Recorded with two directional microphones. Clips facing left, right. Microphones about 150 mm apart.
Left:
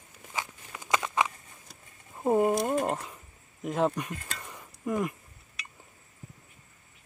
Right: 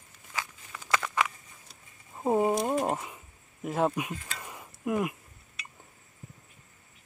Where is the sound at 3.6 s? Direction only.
Centre (ahead or behind).